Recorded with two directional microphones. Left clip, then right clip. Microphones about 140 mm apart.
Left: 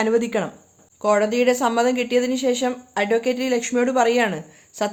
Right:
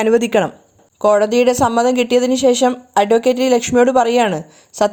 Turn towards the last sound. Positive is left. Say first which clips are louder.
# right 9 dB
turn(degrees=-40)  # may be behind; listen again after turning